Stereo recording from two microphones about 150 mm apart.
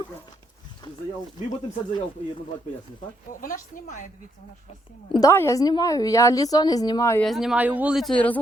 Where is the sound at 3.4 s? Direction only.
60° left (ahead or behind).